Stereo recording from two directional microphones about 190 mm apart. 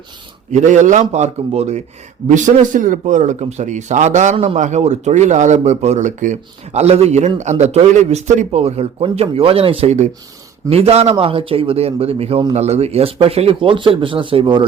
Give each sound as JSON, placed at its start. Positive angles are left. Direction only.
{"t": 0.5, "sound": "a man's voice", "side_deg": -40}